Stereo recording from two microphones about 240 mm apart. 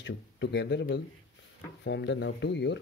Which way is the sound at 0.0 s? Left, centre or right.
Left.